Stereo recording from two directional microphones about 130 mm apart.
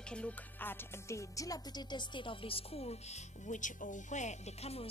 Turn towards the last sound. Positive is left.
turn(degrees=50)  # may be behind; listen again after turning